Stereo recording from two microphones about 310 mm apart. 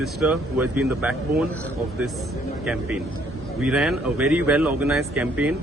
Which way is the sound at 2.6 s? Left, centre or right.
Centre.